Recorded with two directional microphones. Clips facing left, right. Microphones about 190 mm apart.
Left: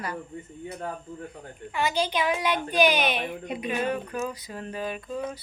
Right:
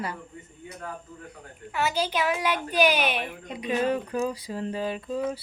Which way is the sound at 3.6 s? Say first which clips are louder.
Right 4 dB; 30° right (ahead or behind).